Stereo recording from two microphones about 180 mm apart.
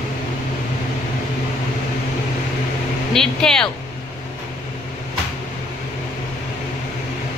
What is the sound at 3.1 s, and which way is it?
Vehicle, 5° left (ahead or behind).